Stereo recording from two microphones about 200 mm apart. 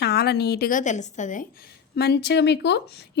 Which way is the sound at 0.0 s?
55° left (ahead or behind).